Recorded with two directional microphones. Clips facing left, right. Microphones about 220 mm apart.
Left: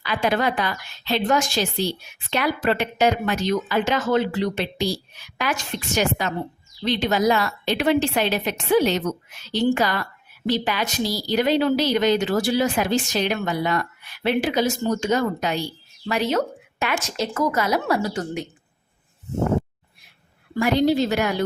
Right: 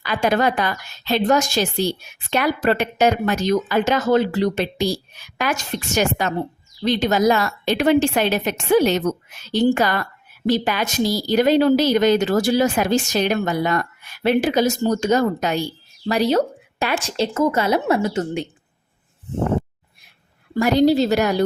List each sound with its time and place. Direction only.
0.0 s a woman's voice: 45° right (ahead or behind); by 18.4 s 25° right (ahead or behind)
20.6 s speech: 40° right (ahead or behind)